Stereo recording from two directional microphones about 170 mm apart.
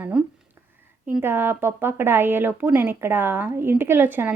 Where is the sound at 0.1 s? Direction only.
5° right (ahead or behind).